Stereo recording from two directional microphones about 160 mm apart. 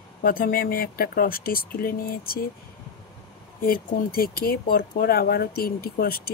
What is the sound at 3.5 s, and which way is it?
Speech, 60° left (ahead or behind).